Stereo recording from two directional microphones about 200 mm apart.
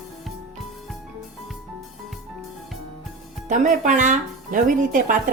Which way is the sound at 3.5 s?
40° right (ahead or behind).